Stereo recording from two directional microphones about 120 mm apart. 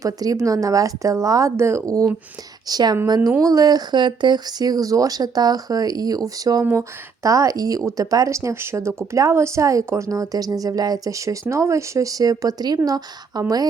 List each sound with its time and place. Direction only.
0.0 s speech: 30° right (ahead or behind)